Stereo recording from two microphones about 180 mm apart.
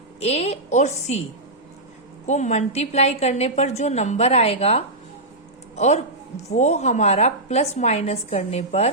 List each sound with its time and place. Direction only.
0.2 s a woman's voice: 35° left (ahead or behind)
2.2 s a woman's voice: 40° left (ahead or behind)